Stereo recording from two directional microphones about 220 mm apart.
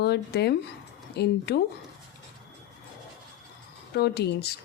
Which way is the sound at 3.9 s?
45° left (ahead or behind).